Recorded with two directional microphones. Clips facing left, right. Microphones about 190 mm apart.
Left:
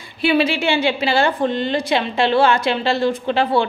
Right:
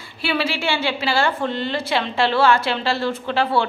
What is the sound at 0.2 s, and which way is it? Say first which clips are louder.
A woman's voice: left 6 dB; 20° left (ahead or behind).